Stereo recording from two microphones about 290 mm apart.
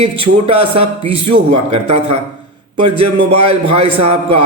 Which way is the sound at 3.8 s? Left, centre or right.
Right.